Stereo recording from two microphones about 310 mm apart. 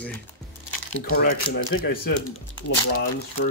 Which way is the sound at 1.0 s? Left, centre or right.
Left.